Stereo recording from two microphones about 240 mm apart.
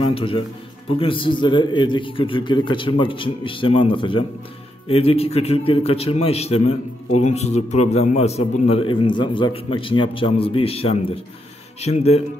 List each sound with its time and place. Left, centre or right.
0.1 s a man's voice: left